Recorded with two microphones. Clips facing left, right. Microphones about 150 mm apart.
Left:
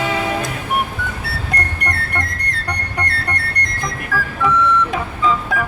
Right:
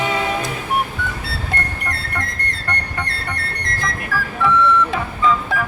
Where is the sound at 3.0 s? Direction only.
Centre (ahead or behind).